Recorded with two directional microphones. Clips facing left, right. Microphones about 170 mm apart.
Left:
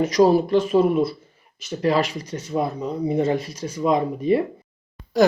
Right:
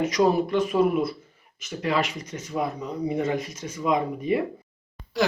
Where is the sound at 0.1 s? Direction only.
35° left (ahead or behind).